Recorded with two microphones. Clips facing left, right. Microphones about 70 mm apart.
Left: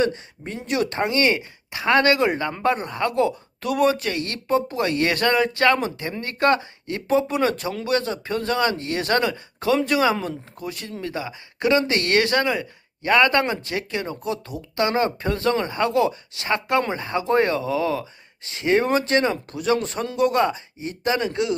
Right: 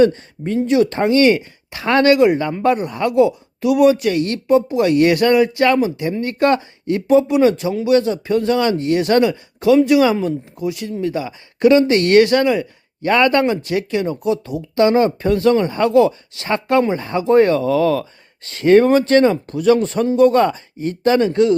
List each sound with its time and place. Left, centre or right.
0.4 s speech: left
11.0 s speech: left
11.9 s speech: right
12.1 s speech: left
14.3 s speech: right
14.8 s speech: left
19.0 s speech: right
21.0 s speech: centre
21.2 s speech: right